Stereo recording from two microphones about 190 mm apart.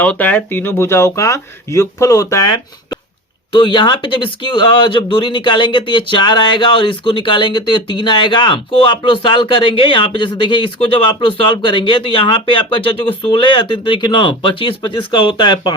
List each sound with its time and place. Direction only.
0.0 s speech: 10° left (ahead or behind)
3.5 s speech: 25° left (ahead or behind)